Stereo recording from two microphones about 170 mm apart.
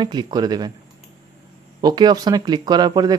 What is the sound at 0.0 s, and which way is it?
Speech, 25° right (ahead or behind).